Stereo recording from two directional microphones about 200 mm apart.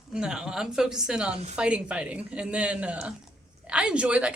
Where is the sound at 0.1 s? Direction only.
5° right (ahead or behind).